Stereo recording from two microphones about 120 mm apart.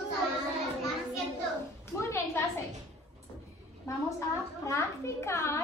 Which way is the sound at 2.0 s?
25° left (ahead or behind).